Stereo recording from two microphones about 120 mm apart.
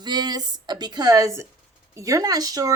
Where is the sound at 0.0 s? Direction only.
35° right (ahead or behind).